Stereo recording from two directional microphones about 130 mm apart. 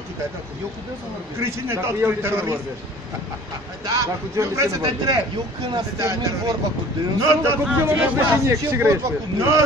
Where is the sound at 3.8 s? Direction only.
25° right (ahead or behind).